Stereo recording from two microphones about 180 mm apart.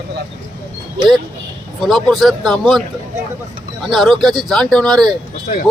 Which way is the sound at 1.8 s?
Centre (ahead or behind).